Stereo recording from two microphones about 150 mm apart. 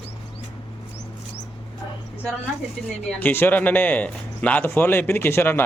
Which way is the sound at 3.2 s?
15° left (ahead or behind).